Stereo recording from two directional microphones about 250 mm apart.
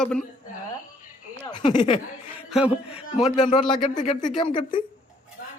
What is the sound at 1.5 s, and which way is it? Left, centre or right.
Speech, centre.